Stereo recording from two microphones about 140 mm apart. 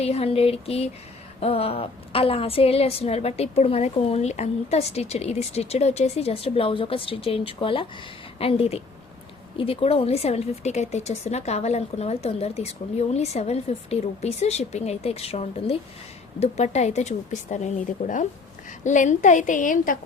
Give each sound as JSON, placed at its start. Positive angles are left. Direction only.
{"t": 0.0, "sound": "a woman's voice", "side_deg": 45}